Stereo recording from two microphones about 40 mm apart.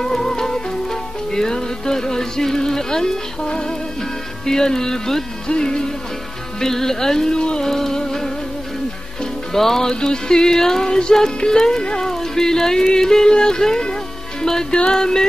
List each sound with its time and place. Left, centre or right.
0.0 s music: centre